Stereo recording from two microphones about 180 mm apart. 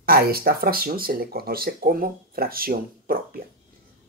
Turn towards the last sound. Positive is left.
turn(degrees=-55)  # may be behind; listen again after turning